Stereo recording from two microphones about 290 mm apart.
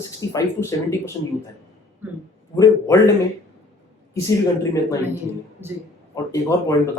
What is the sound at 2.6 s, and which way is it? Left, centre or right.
Speech, centre.